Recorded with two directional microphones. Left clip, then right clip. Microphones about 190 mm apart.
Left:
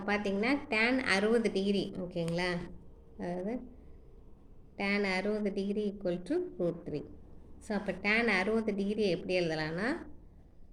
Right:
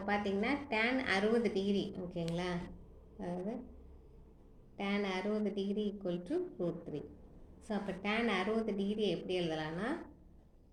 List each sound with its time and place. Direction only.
0.0 s a woman's voice: 45° left (ahead or behind)
4.8 s a woman's voice: 45° left (ahead or behind)